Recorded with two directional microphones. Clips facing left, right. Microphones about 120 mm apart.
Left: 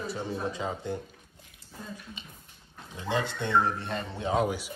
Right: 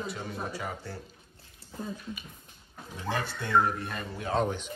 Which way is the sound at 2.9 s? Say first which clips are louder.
Left 3 dB; 20° left (ahead or behind).